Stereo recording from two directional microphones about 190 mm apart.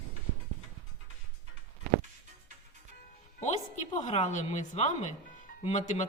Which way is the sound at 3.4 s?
40° left (ahead or behind).